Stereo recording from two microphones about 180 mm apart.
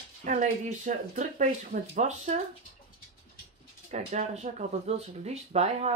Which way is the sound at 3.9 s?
40° right (ahead or behind).